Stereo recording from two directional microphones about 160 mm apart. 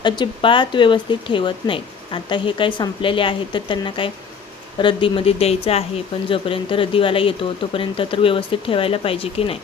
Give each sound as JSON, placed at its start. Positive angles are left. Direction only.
{"t": 0.0, "sound": "speech", "side_deg": 30}